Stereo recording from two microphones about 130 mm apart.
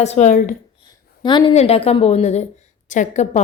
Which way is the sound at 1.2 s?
35° left (ahead or behind).